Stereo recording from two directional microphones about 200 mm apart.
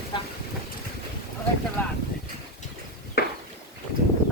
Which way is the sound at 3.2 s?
50° left (ahead or behind).